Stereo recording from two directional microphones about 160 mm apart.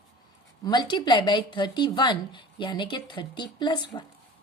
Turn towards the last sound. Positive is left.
turn(degrees=30)  # may be behind; listen again after turning